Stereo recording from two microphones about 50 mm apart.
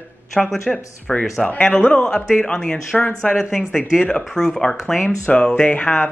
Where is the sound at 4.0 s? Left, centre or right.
Centre.